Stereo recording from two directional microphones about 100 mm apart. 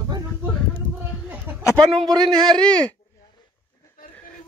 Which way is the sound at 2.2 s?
5° left (ahead or behind).